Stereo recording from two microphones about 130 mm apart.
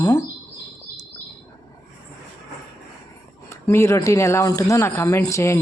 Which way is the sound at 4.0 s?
25° left (ahead or behind).